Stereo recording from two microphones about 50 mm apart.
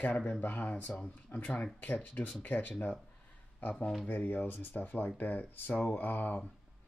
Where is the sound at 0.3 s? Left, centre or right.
Left.